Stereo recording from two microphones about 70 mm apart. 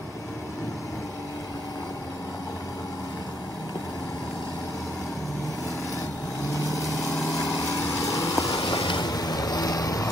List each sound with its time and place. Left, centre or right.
6.5 s vehicle: left
8.6 s vehicle: left